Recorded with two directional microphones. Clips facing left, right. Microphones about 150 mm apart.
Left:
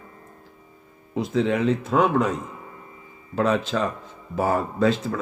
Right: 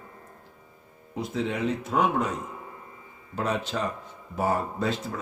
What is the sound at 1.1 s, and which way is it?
Speech, 90° left.